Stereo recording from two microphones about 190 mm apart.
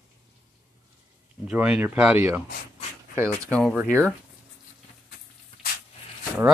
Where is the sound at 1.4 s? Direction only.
5° right (ahead or behind).